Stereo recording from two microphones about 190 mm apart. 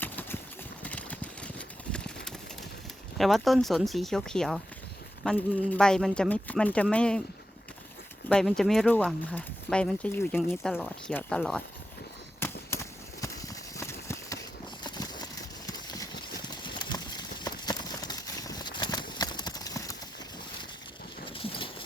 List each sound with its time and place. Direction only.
0.0 s clip-clop: 10° left (ahead or behind)
0.8 s a sound: 5° left (ahead or behind)
3.2 s speech: centre (ahead or behind)
8.3 s speech: 5° left (ahead or behind)
10.6 s speech: centre (ahead or behind)
12.4 s a sound: 10° left (ahead or behind)
14.8 s horse: 20° left (ahead or behind)
21.2 s horse: 30° left (ahead or behind)